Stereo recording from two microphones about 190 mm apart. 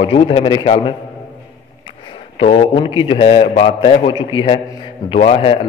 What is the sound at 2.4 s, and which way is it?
A man's voice, 30° left (ahead or behind).